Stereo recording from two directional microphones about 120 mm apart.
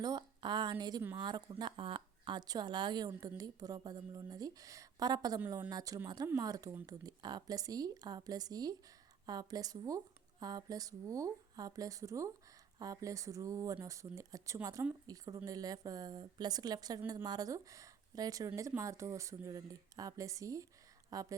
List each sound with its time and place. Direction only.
0.0 s a woman's voice: 35° right (ahead or behind)